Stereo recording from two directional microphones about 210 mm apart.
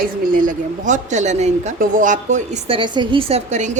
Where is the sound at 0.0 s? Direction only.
40° right (ahead or behind).